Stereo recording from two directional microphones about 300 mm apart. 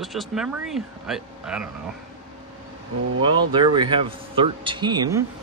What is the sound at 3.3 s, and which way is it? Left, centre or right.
Speech, centre.